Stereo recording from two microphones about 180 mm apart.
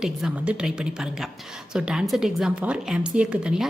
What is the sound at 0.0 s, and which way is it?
A woman's voice, 5° right (ahead or behind).